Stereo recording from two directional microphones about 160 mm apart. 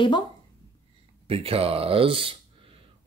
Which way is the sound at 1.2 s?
35° right (ahead or behind).